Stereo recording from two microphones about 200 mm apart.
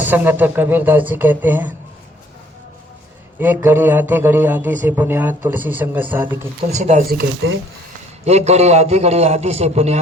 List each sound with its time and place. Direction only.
0.0 s a man's voice: 10° right (ahead or behind)
3.4 s a man's voice: 10° right (ahead or behind)
6.7 s a man's voice: 35° right (ahead or behind)
8.2 s a man's voice: 35° right (ahead or behind)